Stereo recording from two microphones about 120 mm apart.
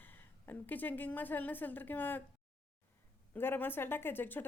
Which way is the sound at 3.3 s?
15° left (ahead or behind).